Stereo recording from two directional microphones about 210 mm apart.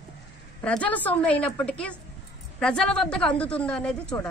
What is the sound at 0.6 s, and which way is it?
A woman's voice, 5° left (ahead or behind).